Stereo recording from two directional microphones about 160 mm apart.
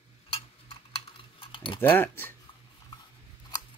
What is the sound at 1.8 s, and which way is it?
Speech, 15° left (ahead or behind).